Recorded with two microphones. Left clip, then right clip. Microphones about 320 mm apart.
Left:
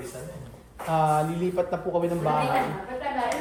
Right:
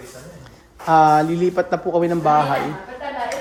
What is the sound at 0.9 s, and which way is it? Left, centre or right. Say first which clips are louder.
Speech: right 10 dB; right.